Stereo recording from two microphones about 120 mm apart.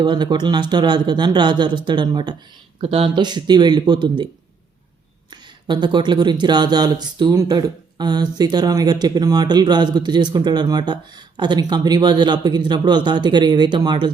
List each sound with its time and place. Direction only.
0.0 s speech: 40° right (ahead or behind)
2.8 s speech: 55° right (ahead or behind)
3.2 s speech: 35° right (ahead or behind)
5.3 s speech: 40° right (ahead or behind)